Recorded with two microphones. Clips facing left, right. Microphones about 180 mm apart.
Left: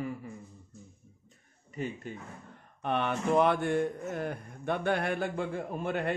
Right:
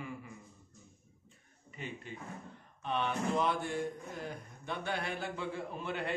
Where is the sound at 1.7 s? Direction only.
40° left (ahead or behind).